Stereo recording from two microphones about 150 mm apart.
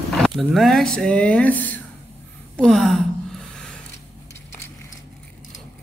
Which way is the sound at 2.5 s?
5° left (ahead or behind).